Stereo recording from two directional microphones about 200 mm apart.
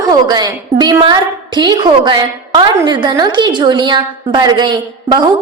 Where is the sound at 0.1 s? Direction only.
20° right (ahead or behind).